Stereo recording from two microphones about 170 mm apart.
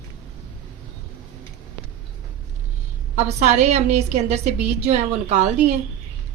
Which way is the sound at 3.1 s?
40° right (ahead or behind).